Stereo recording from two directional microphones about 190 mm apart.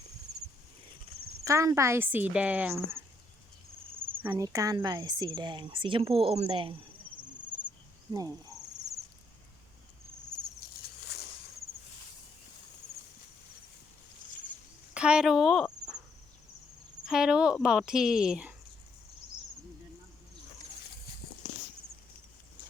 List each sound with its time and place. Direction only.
1.5 s speech: 15° right (ahead or behind)
3.9 s cricket: 30° right (ahead or behind)
4.2 s speech: 15° right (ahead or behind)
14.9 s speech: 5° right (ahead or behind)
17.1 s speech: 5° right (ahead or behind)